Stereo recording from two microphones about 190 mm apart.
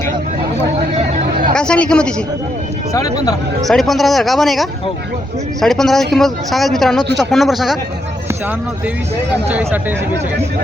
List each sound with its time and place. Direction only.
1.5 s speech: 5° left (ahead or behind)
2.9 s speech: 15° left (ahead or behind)
3.6 s speech: centre (ahead or behind)
9.5 s speech: 10° right (ahead or behind)